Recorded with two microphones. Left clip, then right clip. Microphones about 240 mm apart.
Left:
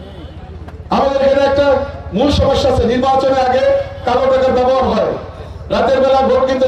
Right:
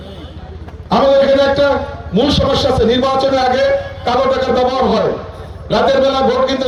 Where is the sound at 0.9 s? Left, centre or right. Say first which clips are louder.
Right 2 dB; right.